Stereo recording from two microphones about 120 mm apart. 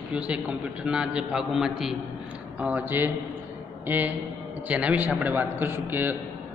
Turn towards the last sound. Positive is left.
turn(degrees=-15)  # may be behind; listen again after turning